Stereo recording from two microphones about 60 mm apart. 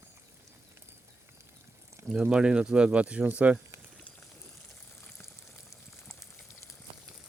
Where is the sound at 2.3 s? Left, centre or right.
Centre.